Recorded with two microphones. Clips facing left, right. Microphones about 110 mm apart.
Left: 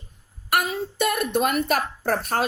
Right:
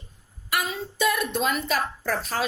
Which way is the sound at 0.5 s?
55° left (ahead or behind).